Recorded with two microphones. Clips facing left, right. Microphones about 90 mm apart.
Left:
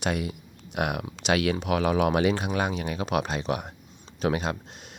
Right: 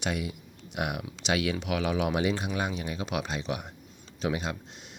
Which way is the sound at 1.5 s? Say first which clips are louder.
Left 5 dB; 40° left (ahead or behind).